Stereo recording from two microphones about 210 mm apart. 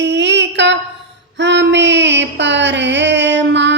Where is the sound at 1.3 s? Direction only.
55° right (ahead or behind).